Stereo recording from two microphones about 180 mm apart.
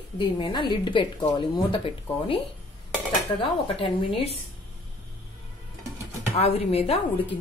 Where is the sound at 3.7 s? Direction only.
35° left (ahead or behind).